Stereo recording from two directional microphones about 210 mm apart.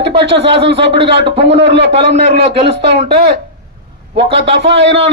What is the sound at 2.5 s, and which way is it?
Speech, 25° right (ahead or behind).